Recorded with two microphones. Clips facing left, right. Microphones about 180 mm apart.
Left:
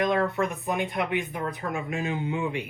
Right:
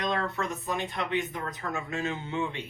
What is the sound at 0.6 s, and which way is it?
A man's voice, 20° left (ahead or behind).